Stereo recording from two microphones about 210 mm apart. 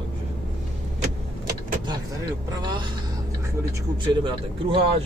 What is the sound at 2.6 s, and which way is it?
Speech, 20° right (ahead or behind).